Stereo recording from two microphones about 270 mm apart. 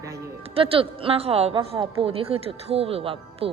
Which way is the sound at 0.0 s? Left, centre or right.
Centre.